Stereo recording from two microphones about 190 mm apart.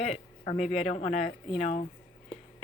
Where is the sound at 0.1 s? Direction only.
35° left (ahead or behind).